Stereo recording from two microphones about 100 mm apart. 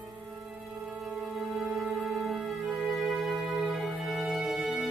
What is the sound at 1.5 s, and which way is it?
Music, centre (ahead or behind).